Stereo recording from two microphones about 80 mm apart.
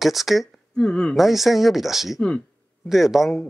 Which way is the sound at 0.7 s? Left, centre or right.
Centre.